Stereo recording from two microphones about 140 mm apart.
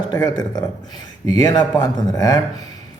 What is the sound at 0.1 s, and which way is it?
A man's voice, 30° left (ahead or behind).